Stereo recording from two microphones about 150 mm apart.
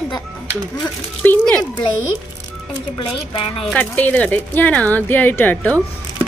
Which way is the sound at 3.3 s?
35° left (ahead or behind).